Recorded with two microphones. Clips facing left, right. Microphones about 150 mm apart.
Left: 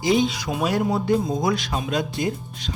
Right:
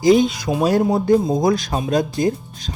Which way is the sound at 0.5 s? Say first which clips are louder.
Right 7 dB; 35° right (ahead or behind).